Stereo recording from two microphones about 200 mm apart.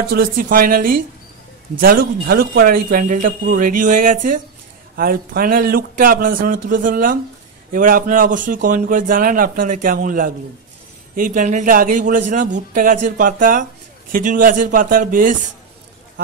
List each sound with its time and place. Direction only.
0.1 s a man's voice: 45° right (ahead or behind)